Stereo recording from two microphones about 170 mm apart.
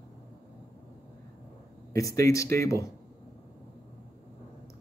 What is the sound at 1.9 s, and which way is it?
Speech, 20° left (ahead or behind).